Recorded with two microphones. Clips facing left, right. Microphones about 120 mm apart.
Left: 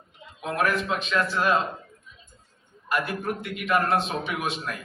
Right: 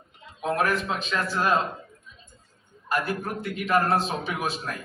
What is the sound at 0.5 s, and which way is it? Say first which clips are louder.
A man's voice: left 1 dB; 30° right (ahead or behind).